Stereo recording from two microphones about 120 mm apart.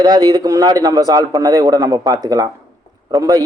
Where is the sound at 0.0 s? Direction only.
35° right (ahead or behind).